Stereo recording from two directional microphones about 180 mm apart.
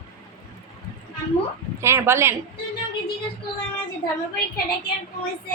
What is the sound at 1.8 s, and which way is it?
Speech, 15° right (ahead or behind).